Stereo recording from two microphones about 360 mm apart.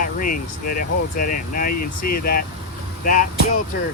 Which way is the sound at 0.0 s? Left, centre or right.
Left.